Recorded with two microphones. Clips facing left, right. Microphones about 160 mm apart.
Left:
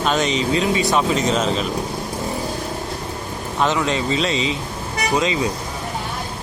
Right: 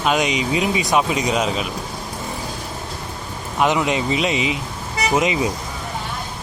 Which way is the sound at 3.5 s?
15° right (ahead or behind).